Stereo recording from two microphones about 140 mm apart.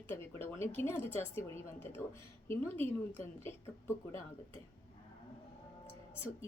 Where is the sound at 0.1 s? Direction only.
20° left (ahead or behind).